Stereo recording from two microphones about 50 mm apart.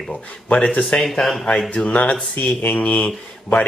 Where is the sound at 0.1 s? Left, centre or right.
Left.